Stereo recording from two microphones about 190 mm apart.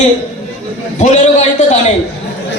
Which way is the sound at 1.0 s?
35° left (ahead or behind).